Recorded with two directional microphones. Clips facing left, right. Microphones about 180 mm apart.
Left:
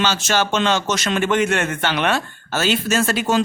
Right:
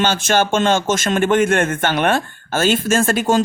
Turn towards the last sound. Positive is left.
turn(degrees=-50)  # may be behind; listen again after turning